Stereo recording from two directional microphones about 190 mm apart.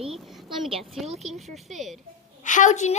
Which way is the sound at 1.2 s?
Centre (ahead or behind).